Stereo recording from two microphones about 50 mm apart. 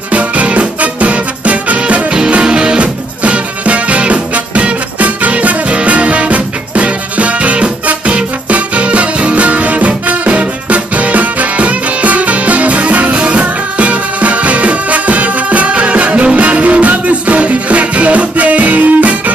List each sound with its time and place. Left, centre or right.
0.1 s music: right